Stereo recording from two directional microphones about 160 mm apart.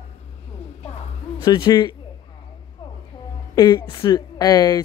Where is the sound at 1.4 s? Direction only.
25° left (ahead or behind).